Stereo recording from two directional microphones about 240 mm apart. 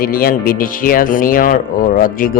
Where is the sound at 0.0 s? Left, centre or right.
Left.